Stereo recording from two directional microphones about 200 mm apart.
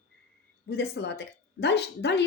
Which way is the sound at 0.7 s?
55° left (ahead or behind).